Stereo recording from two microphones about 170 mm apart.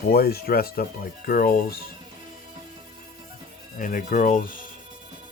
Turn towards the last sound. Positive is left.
turn(degrees=50)  # may be behind; listen again after turning